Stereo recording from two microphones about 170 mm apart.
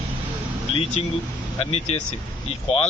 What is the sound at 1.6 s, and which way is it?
Speech, 35° left (ahead or behind).